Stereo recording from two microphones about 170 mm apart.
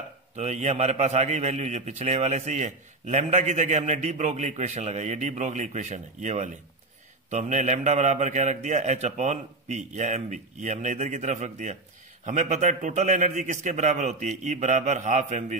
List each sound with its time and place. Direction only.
0.4 s a man's voice: 45° right (ahead or behind)